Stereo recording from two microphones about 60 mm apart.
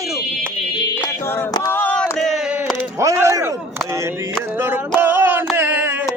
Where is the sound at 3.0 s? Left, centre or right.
Right.